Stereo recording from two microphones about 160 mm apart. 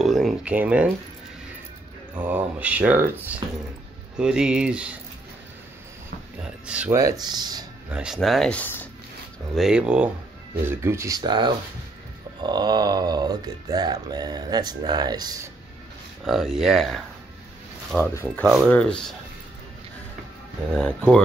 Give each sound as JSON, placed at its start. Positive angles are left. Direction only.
{"t": 0.0, "sound": "speech", "side_deg": 0}
{"t": 2.1, "sound": "speech", "side_deg": -10}
{"t": 6.6, "sound": "speech", "side_deg": -10}
{"t": 7.0, "sound": "a sound", "side_deg": -20}
{"t": 7.9, "sound": "speech", "side_deg": -5}
{"t": 9.6, "sound": "speech", "side_deg": -5}
{"t": 10.6, "sound": "a sound", "side_deg": -15}
{"t": 16.3, "sound": "speech", "side_deg": 0}
{"t": 18.1, "sound": "speech", "side_deg": 10}
{"t": 20.7, "sound": "speech", "side_deg": 5}